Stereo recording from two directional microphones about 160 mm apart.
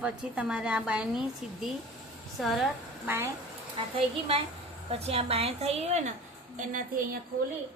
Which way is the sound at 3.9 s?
35° right (ahead or behind).